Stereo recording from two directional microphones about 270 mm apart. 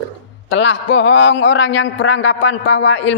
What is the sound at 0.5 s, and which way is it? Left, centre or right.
A man's voice, left.